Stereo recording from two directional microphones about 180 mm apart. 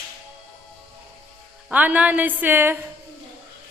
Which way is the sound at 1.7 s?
10° right (ahead or behind).